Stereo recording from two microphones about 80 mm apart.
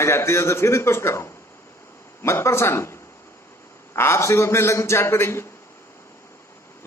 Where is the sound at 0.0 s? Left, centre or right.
Left.